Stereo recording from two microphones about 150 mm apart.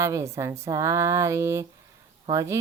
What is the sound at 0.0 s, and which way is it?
Speech, 20° right (ahead or behind).